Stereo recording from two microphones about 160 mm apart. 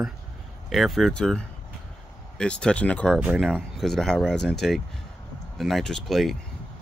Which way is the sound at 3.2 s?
5° right (ahead or behind).